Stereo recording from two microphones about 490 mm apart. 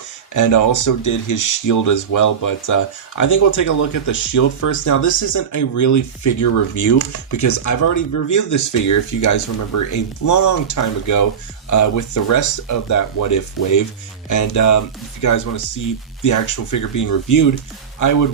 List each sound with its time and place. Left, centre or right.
0.3 s speech: left